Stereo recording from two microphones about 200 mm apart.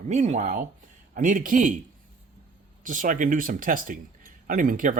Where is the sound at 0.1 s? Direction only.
35° right (ahead or behind).